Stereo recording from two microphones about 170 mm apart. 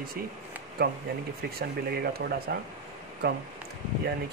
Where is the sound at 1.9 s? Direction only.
65° right (ahead or behind).